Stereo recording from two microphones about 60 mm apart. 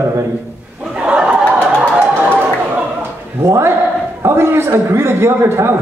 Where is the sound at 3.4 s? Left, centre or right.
Right.